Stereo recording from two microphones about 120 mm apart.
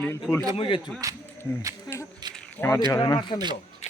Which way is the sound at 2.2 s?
35° right (ahead or behind).